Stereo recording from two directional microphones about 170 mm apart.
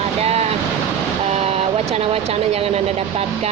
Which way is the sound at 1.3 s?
35° right (ahead or behind).